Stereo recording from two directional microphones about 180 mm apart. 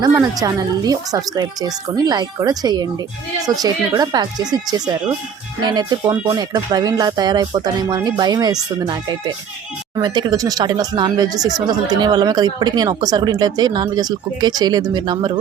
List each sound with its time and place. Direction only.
0.0 s speech: 20° right (ahead or behind)
10.0 s speech: 20° right (ahead or behind)